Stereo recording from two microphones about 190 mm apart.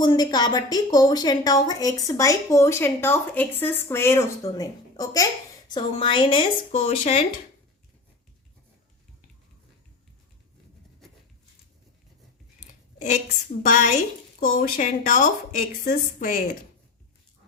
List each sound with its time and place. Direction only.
0.0 s a woman's voice: 20° left (ahead or behind)
12.5 s a woman's voice: 40° left (ahead or behind)